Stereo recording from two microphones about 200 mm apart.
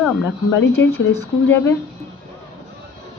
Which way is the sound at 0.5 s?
70° left (ahead or behind).